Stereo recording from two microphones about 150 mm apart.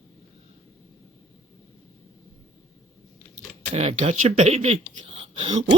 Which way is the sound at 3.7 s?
45° right (ahead or behind).